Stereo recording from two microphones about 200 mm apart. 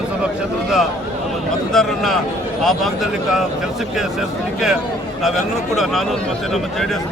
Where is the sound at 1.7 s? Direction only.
Centre (ahead or behind).